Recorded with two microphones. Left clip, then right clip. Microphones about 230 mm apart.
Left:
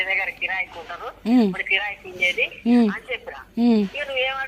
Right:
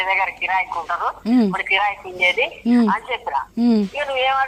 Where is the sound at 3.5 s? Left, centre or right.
Centre.